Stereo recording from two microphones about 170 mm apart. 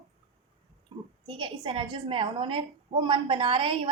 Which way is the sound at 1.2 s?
30° right (ahead or behind).